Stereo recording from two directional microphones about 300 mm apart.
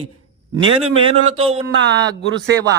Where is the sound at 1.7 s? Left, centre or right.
Right.